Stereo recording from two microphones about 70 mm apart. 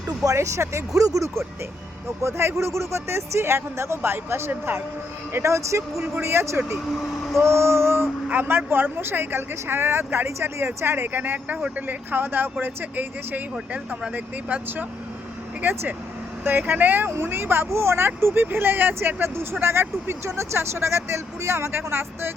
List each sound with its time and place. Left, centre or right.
0.3 s speech: right
2.2 s speech: right; by 11.9 s centre
12.1 s speech: right
15.7 s speech: right